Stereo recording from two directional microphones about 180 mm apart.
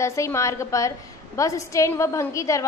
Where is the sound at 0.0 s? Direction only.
15° left (ahead or behind).